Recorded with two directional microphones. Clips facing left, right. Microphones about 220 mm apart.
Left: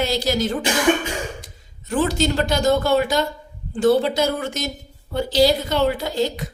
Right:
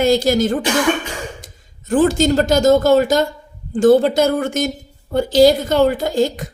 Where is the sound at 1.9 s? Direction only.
50° right (ahead or behind).